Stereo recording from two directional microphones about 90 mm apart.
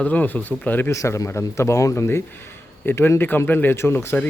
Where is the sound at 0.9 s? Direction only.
35° left (ahead or behind).